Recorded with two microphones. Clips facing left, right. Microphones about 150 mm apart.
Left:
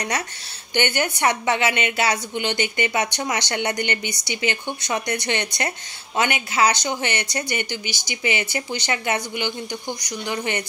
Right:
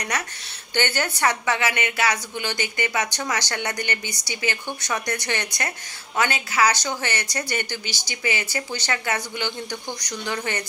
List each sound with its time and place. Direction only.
0.1 s a woman's voice: 30° left (ahead or behind)
0.7 s a woman's voice: 20° left (ahead or behind)